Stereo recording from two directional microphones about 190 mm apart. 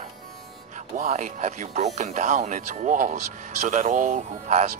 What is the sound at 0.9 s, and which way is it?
Speech, 40° right (ahead or behind).